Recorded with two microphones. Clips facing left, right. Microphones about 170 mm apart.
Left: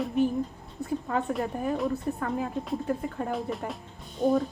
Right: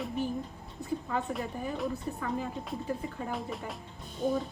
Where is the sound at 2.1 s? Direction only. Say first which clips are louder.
Left 4 dB; 60° left (ahead or behind).